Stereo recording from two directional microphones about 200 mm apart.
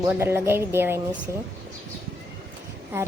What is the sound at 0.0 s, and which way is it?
A woman's voice, 10° right (ahead or behind).